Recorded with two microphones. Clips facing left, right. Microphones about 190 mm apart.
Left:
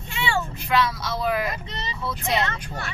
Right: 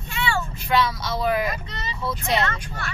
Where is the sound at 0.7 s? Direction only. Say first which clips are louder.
Right 1 dB; centre (ahead or behind).